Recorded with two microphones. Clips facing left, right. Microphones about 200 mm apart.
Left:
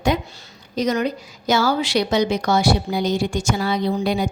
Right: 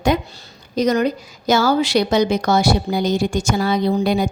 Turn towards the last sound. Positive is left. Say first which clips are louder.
# right 3 dB
turn(degrees=-45)  # may be behind; listen again after turning